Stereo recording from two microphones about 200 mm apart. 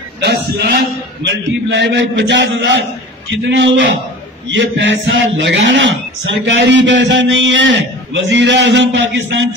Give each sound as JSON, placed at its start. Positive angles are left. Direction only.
{"t": 0.2, "sound": "a man's voice", "side_deg": -55}